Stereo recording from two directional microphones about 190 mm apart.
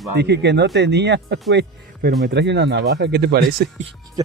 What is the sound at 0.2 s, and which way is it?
Speech, 65° right (ahead or behind).